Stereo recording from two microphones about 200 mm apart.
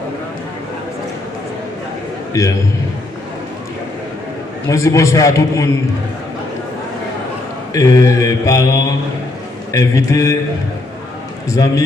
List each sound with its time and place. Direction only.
2.3 s mantra: 15° left (ahead or behind)
4.7 s mantra: 15° left (ahead or behind)
7.7 s mantra: 15° left (ahead or behind)